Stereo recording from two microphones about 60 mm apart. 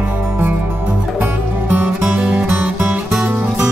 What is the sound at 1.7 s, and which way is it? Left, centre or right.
Music, right.